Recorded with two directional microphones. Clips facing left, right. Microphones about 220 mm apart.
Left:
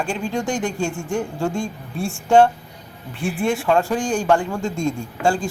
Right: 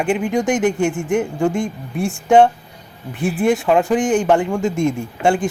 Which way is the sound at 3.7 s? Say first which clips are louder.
Right 4 dB; 15° right (ahead or behind).